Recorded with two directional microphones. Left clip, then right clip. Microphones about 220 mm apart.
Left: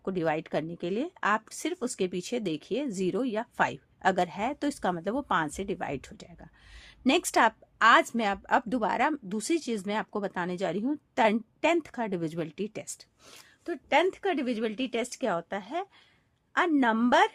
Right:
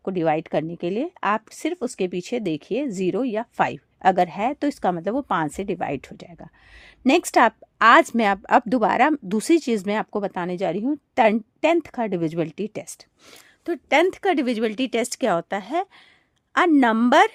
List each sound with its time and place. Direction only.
0.0 s a woman's voice: 30° right (ahead or behind)
13.7 s speech: 45° right (ahead or behind)